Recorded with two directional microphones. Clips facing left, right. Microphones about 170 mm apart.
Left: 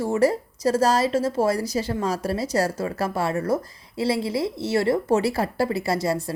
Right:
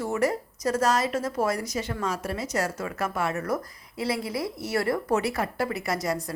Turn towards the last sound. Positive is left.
turn(degrees=30)  # may be behind; listen again after turning